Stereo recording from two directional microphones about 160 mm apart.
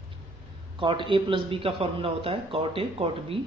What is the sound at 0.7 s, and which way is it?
A man's voice, 30° right (ahead or behind).